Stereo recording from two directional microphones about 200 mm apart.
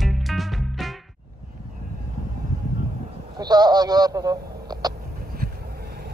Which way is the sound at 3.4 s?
20° right (ahead or behind).